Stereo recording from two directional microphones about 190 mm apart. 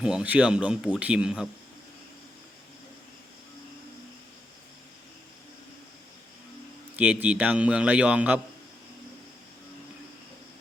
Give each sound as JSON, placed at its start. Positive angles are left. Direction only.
{"t": 0.0, "sound": "speech", "side_deg": -5}
{"t": 6.9, "sound": "a man's voice", "side_deg": -10}